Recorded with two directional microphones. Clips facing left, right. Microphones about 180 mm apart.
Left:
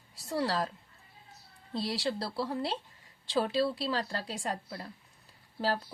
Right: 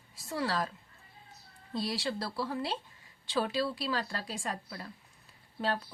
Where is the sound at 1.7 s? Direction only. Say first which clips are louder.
Left 1 dB; 30° left (ahead or behind).